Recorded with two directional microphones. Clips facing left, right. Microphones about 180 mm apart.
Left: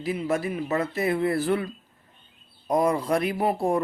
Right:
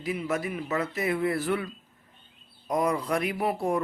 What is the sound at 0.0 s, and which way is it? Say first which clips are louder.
Speech: left 3 dB; 30° left (ahead or behind).